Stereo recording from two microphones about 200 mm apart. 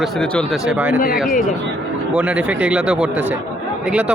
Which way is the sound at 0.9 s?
45° left (ahead or behind).